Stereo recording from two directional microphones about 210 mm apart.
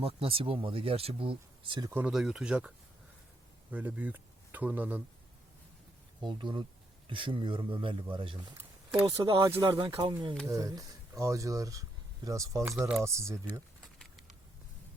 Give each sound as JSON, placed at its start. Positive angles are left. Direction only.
{"t": 0.0, "sound": "speech", "side_deg": -25}
{"t": 1.9, "sound": "speech", "side_deg": -5}
{"t": 6.2, "sound": "speech", "side_deg": -20}